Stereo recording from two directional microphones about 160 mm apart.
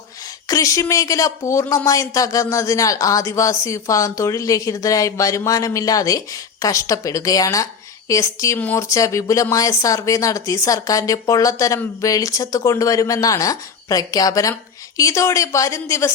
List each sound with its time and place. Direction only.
0.4 s speech: 20° left (ahead or behind)